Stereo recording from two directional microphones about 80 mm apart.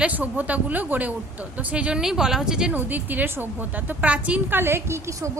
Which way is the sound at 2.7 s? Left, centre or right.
Right.